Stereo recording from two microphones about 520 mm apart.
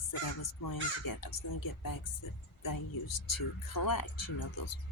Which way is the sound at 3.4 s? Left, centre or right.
Left.